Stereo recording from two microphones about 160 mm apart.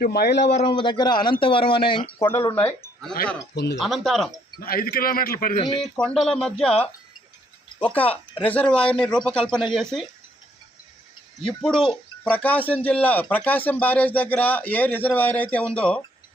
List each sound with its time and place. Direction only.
0.0 s speech: 85° left
0.5 s speech: 35° left (ahead or behind)
2.1 s speech: 15° left (ahead or behind)
3.5 s speech: 90° left
3.8 s speech: centre (ahead or behind)
4.6 s a man's voice: 65° left (ahead or behind)
5.8 s speech: 5° left (ahead or behind)
6.7 s speech: 35° left (ahead or behind)
8.4 s speech: 10° left (ahead or behind)
11.4 s speech: 5° left (ahead or behind)